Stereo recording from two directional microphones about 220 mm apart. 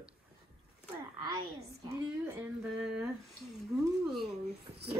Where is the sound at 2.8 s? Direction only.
5° right (ahead or behind).